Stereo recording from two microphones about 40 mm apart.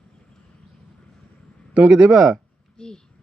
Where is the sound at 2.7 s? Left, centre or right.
Centre.